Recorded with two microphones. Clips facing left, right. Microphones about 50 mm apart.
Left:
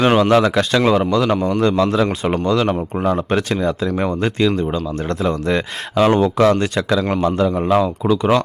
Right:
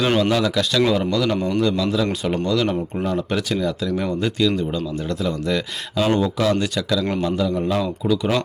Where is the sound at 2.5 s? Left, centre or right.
Left.